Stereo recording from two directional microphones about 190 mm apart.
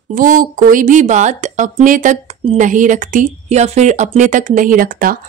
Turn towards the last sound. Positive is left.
turn(degrees=-50)  # may be behind; listen again after turning